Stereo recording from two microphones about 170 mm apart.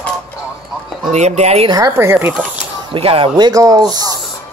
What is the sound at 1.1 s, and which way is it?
Speech, 40° right (ahead or behind).